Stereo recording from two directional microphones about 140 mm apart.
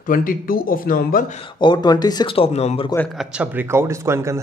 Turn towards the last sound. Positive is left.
turn(degrees=-20)  # may be behind; listen again after turning